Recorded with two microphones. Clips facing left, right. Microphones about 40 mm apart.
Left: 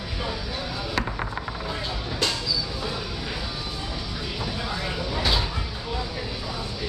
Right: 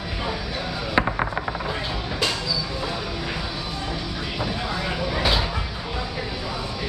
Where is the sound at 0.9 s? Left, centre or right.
Right.